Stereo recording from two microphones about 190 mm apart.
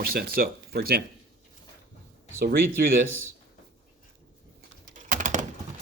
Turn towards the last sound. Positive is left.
turn(degrees=-40)  # may be behind; listen again after turning